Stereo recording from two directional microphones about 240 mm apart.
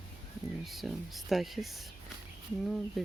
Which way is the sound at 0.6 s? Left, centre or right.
Centre.